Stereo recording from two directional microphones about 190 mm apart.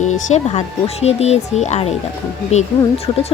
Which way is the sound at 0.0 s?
40° left (ahead or behind).